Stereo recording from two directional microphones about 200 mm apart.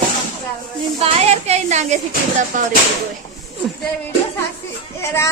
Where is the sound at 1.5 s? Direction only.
35° right (ahead or behind).